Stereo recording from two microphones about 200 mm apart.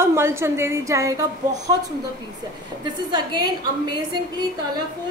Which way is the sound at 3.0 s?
20° right (ahead or behind).